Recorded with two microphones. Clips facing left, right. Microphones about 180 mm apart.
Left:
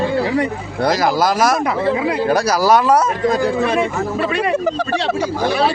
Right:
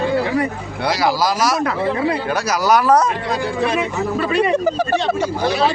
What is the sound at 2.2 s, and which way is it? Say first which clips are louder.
Speech: left 3 dB; 35° left (ahead or behind).